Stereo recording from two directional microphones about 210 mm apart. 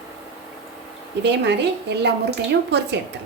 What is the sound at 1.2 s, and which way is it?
A woman's voice, 55° right (ahead or behind).